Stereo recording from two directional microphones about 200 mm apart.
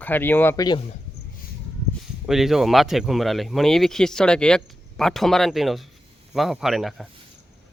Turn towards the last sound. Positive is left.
turn(degrees=0)  # may be behind; listen again after turning